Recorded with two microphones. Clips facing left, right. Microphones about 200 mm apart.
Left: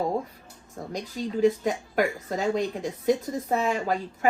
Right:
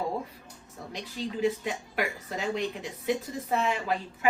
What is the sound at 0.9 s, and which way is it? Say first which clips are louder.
A woman's voice: left 5 dB; 45° left (ahead or behind).